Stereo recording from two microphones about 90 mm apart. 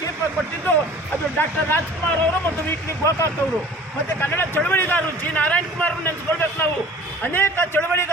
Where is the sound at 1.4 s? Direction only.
25° left (ahead or behind).